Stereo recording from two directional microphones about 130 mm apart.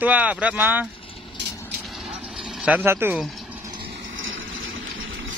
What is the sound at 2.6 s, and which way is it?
Speech, 10° right (ahead or behind).